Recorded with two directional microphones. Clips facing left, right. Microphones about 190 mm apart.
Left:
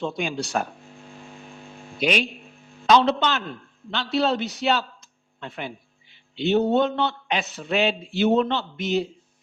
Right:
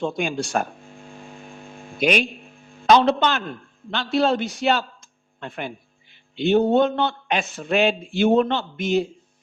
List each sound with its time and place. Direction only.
0.0 s speech: 50° right (ahead or behind)
2.0 s a man's voice: 50° right (ahead or behind)